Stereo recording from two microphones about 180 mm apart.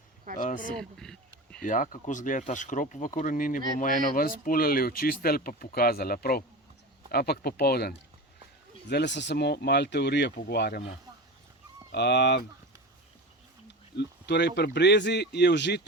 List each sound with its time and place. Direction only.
0.3 s a sound: 50° left (ahead or behind)
0.8 s a sound: 5° left (ahead or behind)
1.6 s speech: 45° left (ahead or behind)
8.9 s speech: 70° left (ahead or behind)
11.9 s speech: 65° left (ahead or behind)
13.7 s speech: 70° left (ahead or behind)